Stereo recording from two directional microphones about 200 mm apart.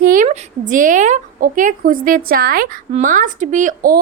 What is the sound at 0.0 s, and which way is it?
A woman's voice, 40° right (ahead or behind).